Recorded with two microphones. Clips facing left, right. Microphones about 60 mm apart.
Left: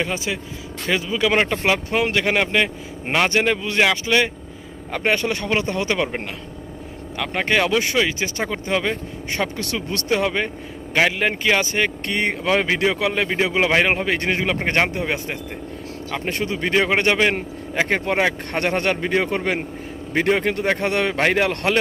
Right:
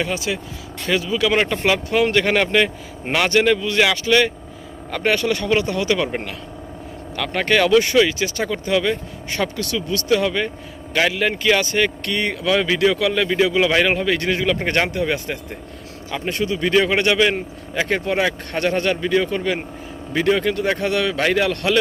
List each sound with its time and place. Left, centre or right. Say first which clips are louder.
0.0 s a man's voice: right 1 dB; left
7.2 s a man's voice: right 2 dB; centre
9.6 s a man's voice: right 3 dB; left